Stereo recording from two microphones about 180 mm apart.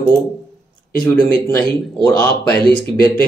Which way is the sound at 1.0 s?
5° left (ahead or behind).